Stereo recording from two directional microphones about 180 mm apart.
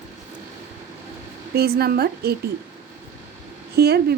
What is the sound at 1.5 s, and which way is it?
Speech, 60° right (ahead or behind).